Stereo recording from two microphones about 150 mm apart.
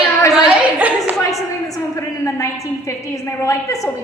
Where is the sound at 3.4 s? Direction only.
20° left (ahead or behind).